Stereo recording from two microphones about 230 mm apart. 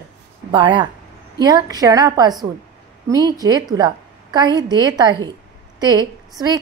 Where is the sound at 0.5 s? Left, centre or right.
Centre.